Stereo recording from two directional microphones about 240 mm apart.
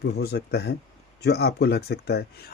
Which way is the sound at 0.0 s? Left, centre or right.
Left.